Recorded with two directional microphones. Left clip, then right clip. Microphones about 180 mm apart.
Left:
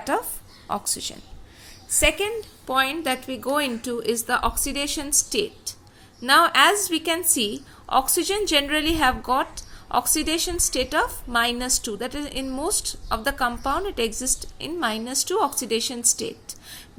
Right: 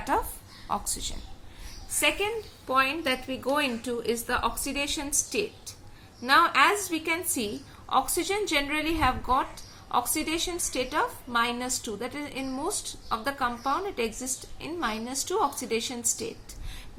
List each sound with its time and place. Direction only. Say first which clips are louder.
0.0 s a woman's voice: left 2 dB; 25° left (ahead or behind)